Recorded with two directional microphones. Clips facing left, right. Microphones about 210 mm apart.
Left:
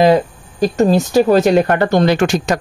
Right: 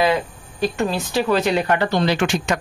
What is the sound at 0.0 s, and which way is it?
Speech, 40° left (ahead or behind).